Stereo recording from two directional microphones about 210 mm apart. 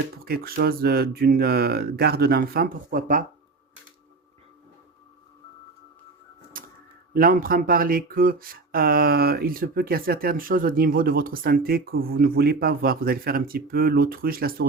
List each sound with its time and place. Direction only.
0.3 s speech: 45° right (ahead or behind)
6.5 s typewriter: 40° right (ahead or behind)
7.1 s speech: 45° right (ahead or behind)